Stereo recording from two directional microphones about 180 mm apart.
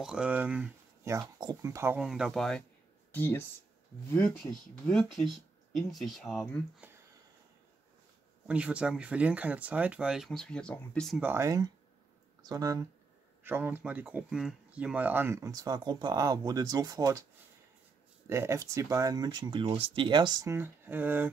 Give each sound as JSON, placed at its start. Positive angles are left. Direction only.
{"t": 0.0, "sound": "speech", "side_deg": -5}
{"t": 1.4, "sound": "speech", "side_deg": -20}
{"t": 2.0, "sound": "speech", "side_deg": -5}
{"t": 8.5, "sound": "speech", "side_deg": -5}
{"t": 11.2, "sound": "speech", "side_deg": -15}
{"t": 18.2, "sound": "speech", "side_deg": -15}